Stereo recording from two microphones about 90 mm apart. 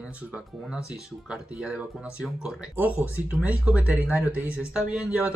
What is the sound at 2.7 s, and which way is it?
Speech, 20° right (ahead or behind).